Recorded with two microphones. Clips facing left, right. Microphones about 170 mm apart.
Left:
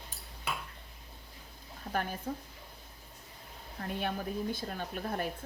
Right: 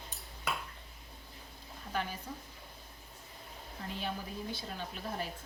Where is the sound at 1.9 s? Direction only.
50° left (ahead or behind).